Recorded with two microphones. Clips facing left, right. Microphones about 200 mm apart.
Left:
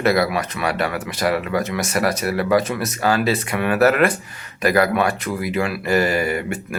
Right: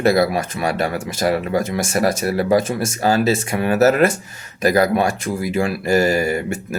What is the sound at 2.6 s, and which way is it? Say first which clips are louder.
Speech: right 2 dB; 50° right (ahead or behind).